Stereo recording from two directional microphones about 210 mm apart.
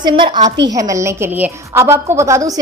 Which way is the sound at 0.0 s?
20° right (ahead or behind).